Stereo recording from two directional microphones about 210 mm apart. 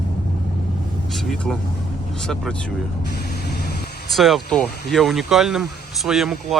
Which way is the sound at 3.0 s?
50° left (ahead or behind).